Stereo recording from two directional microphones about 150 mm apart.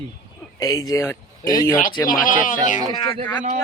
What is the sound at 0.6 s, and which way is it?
Speech, 25° left (ahead or behind).